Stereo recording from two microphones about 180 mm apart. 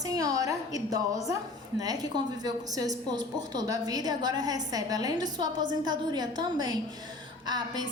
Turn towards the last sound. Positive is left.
turn(degrees=-25)  # may be behind; listen again after turning